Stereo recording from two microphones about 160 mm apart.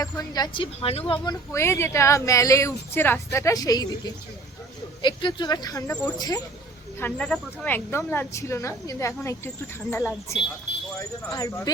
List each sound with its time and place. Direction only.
0.0 s speech: 25° left (ahead or behind)
1.5 s a woman's voice: 15° left (ahead or behind)
7.0 s a woman's voice: 5° left (ahead or behind)